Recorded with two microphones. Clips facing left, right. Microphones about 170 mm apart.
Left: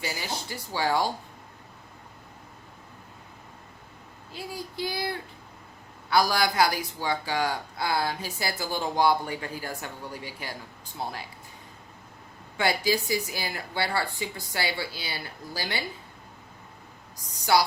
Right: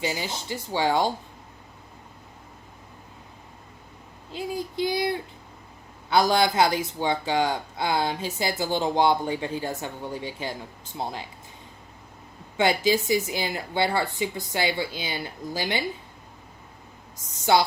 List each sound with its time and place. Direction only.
0.0 s speech: 20° right (ahead or behind)
4.3 s speech: 20° right (ahead or behind)
12.5 s speech: 20° right (ahead or behind)
17.3 s speech: 25° right (ahead or behind)